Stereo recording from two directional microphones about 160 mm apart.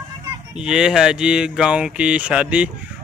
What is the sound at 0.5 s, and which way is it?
Speech, 5° right (ahead or behind).